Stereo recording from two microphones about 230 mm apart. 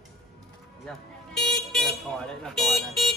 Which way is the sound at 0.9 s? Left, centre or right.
Centre.